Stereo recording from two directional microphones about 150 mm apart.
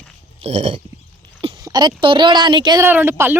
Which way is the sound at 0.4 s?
45° right (ahead or behind).